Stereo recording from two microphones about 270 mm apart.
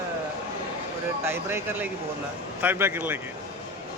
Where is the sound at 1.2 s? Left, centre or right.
Centre.